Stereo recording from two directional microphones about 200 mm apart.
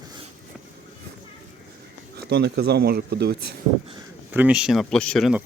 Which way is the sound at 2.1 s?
55° right (ahead or behind).